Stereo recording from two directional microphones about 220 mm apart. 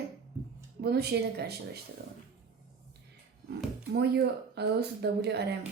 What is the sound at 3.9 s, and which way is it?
Speech, 50° right (ahead or behind).